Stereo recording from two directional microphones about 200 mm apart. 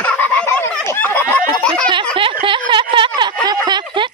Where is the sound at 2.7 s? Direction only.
25° right (ahead or behind).